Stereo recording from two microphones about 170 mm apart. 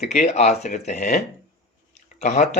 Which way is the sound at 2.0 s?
45° left (ahead or behind).